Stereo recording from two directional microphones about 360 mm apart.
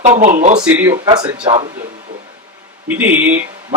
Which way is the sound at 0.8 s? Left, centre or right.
Centre.